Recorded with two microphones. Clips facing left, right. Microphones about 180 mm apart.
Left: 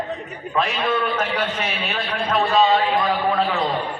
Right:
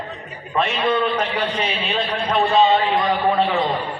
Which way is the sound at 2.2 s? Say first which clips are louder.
Right 1 dB; centre (ahead or behind).